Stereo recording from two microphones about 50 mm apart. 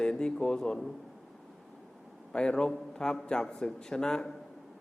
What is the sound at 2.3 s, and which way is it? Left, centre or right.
A man's voice, centre.